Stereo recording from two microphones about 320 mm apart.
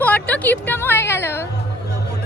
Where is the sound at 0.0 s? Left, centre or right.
Centre.